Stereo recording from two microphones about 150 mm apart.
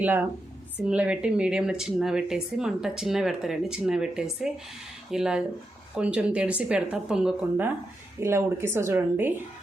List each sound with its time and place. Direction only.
0.0 s speech: 10° right (ahead or behind)